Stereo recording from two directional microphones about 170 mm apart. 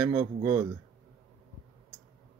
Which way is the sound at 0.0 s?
15° right (ahead or behind).